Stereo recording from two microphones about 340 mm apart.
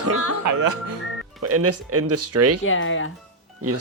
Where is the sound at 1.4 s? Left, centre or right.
Right.